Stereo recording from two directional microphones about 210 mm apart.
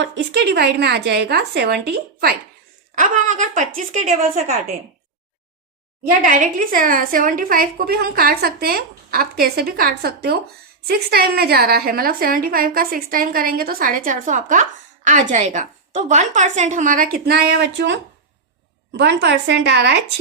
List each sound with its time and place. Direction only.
0.0 s a woman's voice: 55° right (ahead or behind)
2.9 s a woman's voice: 35° right (ahead or behind)
6.2 s a woman's voice: 40° right (ahead or behind)